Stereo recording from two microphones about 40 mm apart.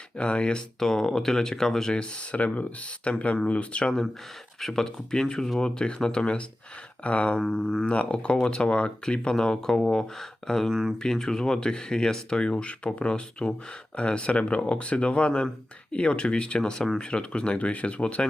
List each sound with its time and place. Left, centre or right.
0.2 s speech: left
0.8 s speech: centre
1.9 s speech: left
2.3 s speech: left
3.0 s speech: left
4.6 s speech: centre; by 7.3 s left
7.3 s speech: centre
7.9 s speech: left
9.3 s speech: centre